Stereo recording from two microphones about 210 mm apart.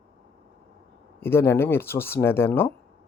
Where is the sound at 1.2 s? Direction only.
10° left (ahead or behind).